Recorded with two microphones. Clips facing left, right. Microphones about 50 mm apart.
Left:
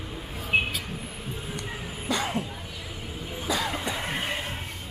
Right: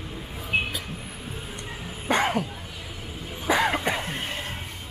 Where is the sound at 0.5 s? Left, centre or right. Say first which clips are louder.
Left 1 dB; centre.